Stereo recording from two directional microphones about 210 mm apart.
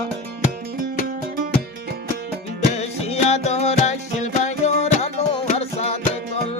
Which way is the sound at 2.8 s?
30° left (ahead or behind).